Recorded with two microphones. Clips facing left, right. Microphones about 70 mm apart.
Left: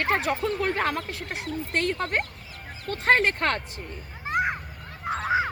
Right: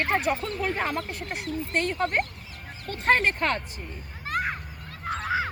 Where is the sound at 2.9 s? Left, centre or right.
Left.